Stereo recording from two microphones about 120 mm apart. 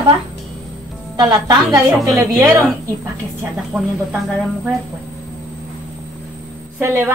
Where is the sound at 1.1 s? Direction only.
35° right (ahead or behind).